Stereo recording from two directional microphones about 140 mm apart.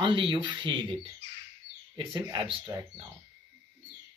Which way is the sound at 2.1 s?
35° right (ahead or behind).